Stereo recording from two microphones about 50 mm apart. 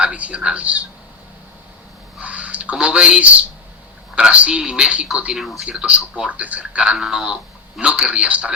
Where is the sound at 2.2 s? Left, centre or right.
Right.